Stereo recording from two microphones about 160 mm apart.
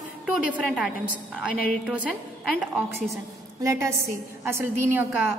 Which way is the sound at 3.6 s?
20° right (ahead or behind).